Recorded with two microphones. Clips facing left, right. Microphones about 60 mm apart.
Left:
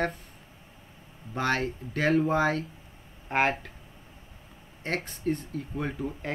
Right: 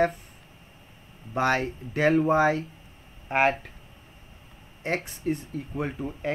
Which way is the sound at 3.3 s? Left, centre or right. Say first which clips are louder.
Right 3 dB; centre.